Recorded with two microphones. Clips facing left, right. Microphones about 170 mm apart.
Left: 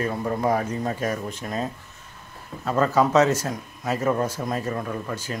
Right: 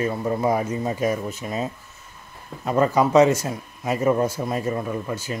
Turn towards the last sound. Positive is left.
turn(degrees=-10)  # may be behind; listen again after turning